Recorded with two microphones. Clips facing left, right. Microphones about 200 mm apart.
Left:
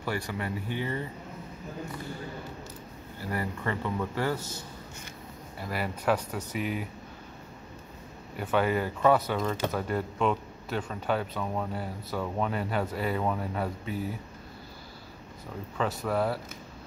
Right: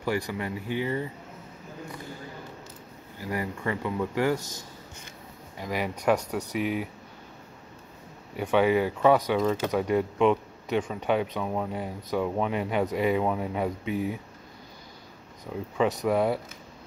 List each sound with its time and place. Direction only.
0.0 s speech: 10° right (ahead or behind)
3.2 s speech: 15° right (ahead or behind)
5.6 s speech: 15° right (ahead or behind)
8.4 s speech: 10° right (ahead or behind)
15.8 s speech: 15° right (ahead or behind)